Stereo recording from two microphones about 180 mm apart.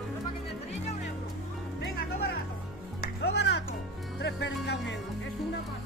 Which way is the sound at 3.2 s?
70° left (ahead or behind).